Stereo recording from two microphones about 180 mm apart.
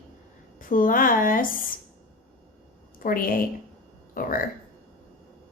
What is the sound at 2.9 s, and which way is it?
A woman's voice, 50° left (ahead or behind).